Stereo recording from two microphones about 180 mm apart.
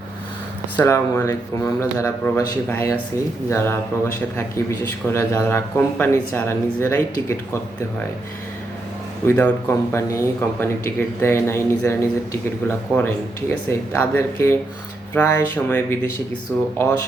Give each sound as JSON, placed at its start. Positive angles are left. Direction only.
{"t": 0.8, "sound": "speech", "side_deg": 15}
{"t": 9.2, "sound": "speech", "side_deg": 10}